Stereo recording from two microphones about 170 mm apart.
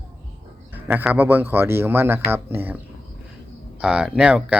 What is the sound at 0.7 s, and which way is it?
Speech, 10° right (ahead or behind).